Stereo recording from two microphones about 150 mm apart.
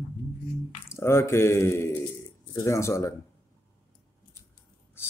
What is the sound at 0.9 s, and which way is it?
Speech, 15° left (ahead or behind).